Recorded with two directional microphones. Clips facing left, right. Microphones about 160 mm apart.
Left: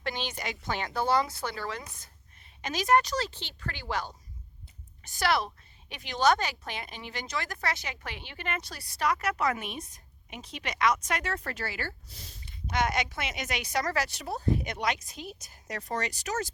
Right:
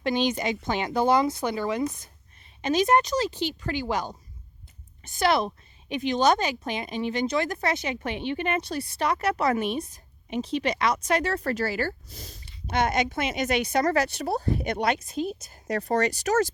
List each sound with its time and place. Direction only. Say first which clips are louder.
0.0 s speech: right 10 dB; 20° right (ahead or behind); by 14.3 s 50° right (ahead or behind)
14.3 s speech: right 4 dB; 70° right (ahead or behind)